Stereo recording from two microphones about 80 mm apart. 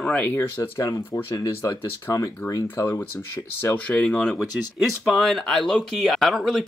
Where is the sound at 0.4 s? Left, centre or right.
Left.